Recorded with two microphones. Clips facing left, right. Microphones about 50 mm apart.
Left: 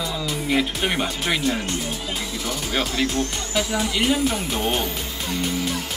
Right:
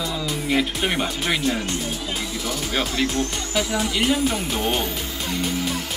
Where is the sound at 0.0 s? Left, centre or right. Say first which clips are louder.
Even; centre.